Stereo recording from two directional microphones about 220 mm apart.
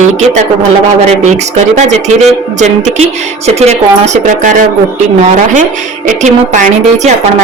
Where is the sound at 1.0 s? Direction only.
30° right (ahead or behind).